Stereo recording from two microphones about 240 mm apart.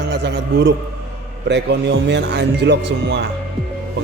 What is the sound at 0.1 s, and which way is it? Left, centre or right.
A man's voice, right.